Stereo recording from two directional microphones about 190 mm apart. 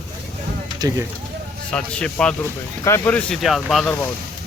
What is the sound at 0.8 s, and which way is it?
Speech, 15° right (ahead or behind).